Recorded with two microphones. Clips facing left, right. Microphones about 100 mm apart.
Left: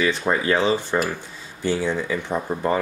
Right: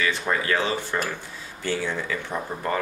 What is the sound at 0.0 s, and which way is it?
Speech, 20° left (ahead or behind).